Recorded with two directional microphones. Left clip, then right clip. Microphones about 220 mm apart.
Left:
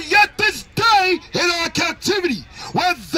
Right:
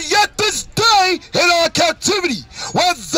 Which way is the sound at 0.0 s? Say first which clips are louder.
Even; 35° right (ahead or behind).